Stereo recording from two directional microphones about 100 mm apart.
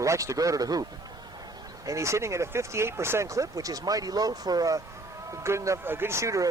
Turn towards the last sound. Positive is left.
turn(degrees=-30)  # may be behind; listen again after turning